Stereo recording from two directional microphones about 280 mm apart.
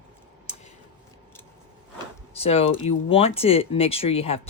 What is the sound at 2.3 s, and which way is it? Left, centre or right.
Speech, left.